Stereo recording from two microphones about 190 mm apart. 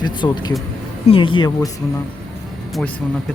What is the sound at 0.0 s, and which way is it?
Speech, 20° left (ahead or behind).